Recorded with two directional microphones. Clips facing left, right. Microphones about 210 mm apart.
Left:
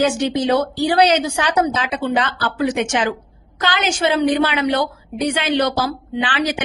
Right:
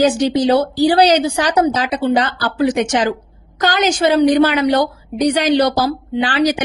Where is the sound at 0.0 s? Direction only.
35° right (ahead or behind).